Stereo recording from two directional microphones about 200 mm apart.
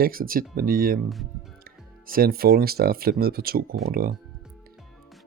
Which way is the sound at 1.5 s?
45° right (ahead or behind).